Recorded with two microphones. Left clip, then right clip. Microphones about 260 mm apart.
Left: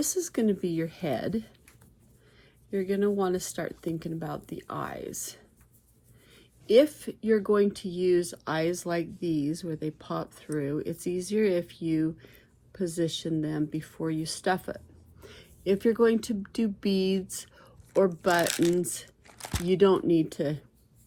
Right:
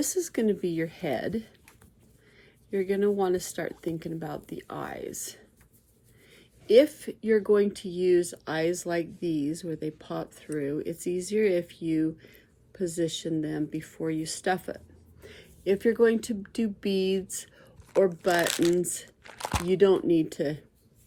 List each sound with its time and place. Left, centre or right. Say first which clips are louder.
0.0 s speech: right 1 dB; centre
2.6 s speech: right 2 dB; centre
19.4 s crumpling: right 6 dB; right
19.6 s speech: even; left